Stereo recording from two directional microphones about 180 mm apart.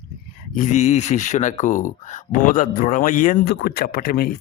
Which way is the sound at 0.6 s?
40° left (ahead or behind).